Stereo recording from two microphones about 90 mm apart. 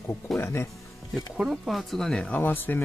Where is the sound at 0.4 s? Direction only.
25° left (ahead or behind).